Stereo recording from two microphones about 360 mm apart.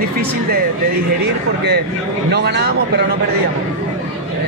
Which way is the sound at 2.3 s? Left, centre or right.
Right.